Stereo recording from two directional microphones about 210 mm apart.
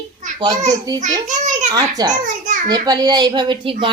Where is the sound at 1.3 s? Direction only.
35° right (ahead or behind).